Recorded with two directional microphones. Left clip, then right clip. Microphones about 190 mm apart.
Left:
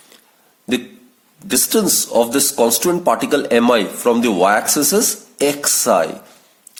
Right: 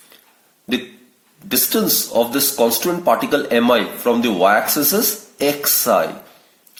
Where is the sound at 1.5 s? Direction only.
45° left (ahead or behind).